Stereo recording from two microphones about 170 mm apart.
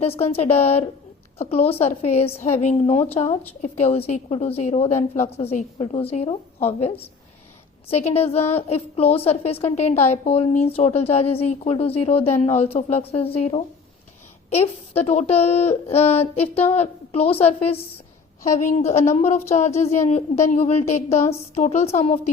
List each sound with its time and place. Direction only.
0.0 s speech: 35° left (ahead or behind)